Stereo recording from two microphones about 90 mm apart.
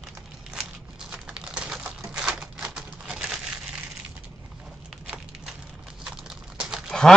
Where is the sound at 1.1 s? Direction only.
10° right (ahead or behind).